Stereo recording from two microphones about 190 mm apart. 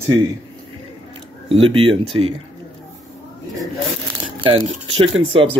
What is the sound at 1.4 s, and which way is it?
Speech, 30° right (ahead or behind).